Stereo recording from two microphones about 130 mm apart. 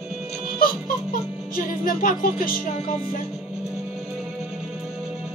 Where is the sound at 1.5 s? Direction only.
90° left.